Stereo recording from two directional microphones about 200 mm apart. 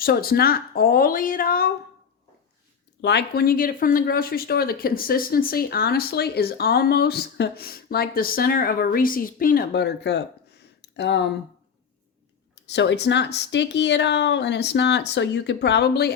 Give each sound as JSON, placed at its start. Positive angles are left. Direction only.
{"t": 0.0, "sound": "speech", "side_deg": 50}
{"t": 3.0, "sound": "speech", "side_deg": 60}
{"t": 10.8, "sound": "a sound", "side_deg": 60}
{"t": 12.7, "sound": "speech", "side_deg": 60}